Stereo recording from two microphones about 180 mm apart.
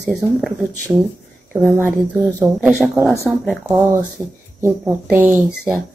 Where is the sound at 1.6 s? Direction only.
5° left (ahead or behind).